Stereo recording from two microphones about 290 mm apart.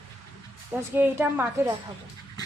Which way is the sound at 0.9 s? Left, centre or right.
Centre.